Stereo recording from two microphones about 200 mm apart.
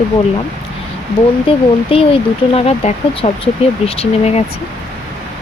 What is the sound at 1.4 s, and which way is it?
Speech, 25° left (ahead or behind).